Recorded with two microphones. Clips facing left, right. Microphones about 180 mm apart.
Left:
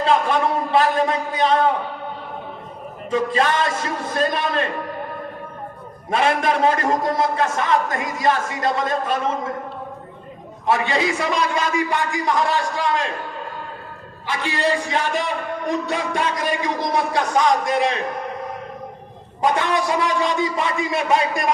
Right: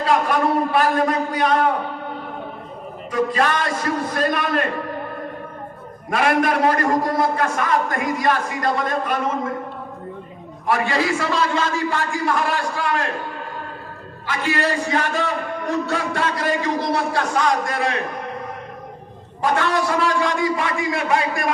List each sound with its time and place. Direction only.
0.0 s a man's voice: 25° left (ahead or behind)
3.1 s a man's voice: 25° left (ahead or behind)
6.1 s a man's voice: 25° left (ahead or behind)
10.7 s a man's voice: 20° left (ahead or behind)
14.3 s a man's voice: 15° left (ahead or behind)
19.4 s a man's voice: 15° left (ahead or behind)